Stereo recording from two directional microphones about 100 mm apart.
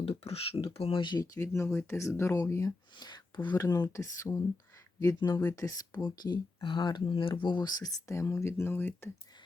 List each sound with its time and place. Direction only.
0.0 s speech: 80° left; by 1.2 s 55° left (ahead or behind)
1.2 s speech: 30° left (ahead or behind)